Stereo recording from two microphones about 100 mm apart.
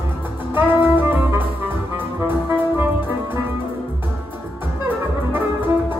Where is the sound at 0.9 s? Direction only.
20° right (ahead or behind).